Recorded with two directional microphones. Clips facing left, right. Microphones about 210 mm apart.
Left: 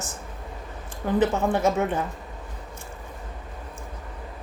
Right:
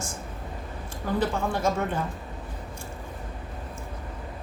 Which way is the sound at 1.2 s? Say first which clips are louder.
Left 5 dB; 20° left (ahead or behind).